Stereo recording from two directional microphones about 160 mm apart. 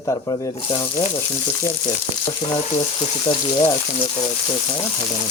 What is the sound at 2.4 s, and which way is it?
Speech, 30° left (ahead or behind).